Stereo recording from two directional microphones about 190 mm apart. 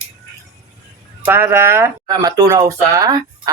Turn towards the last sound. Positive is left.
turn(degrees=-20)  # may be behind; listen again after turning